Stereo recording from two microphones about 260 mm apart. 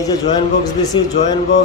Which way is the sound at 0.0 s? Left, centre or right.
Centre.